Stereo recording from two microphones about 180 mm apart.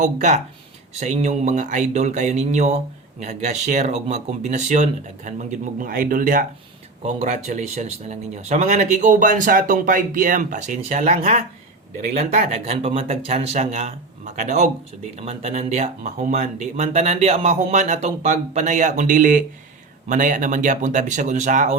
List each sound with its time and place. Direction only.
0.0 s speech: 40° right (ahead or behind)
7.0 s speech: 40° right (ahead or behind)